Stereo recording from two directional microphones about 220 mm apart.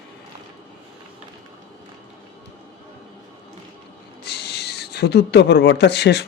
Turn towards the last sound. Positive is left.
turn(degrees=50)  # may be behind; listen again after turning